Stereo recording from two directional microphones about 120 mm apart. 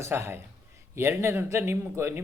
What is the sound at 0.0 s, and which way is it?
A man's voice, 20° right (ahead or behind).